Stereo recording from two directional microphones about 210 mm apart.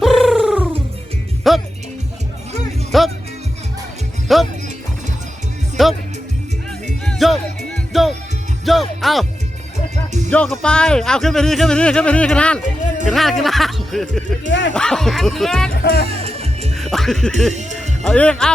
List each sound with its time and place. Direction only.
0.0 s a sound: centre (ahead or behind)
1.5 s music: centre (ahead or behind)
2.9 s music: centre (ahead or behind)
4.3 s music: centre (ahead or behind)
5.8 s music: centre (ahead or behind)
7.0 s music: centre (ahead or behind)
10.2 s speech: 5° left (ahead or behind)
15.7 s speech: 45° left (ahead or behind)
16.0 s music: 30° right (ahead or behind)
16.7 s music: centre (ahead or behind)
17.5 s speech: 35° right (ahead or behind)
18.0 s speech: 5° left (ahead or behind)